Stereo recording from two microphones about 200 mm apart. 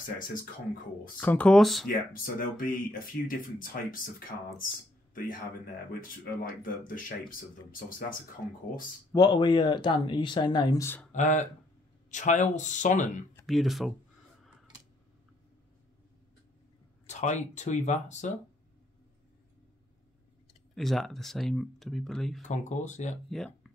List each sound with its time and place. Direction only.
1.2 s speech: 10° left (ahead or behind)
1.9 s speech: 45° left (ahead or behind)
5.9 s speech: 45° left (ahead or behind)
9.1 s speech: 20° left (ahead or behind)
11.1 s speech: 35° left (ahead or behind)
13.5 s speech: centre (ahead or behind)
17.0 s speech: 35° left (ahead or behind)
20.7 s speech: centre (ahead or behind)
22.4 s speech: 35° left (ahead or behind)
23.3 s speech: centre (ahead or behind)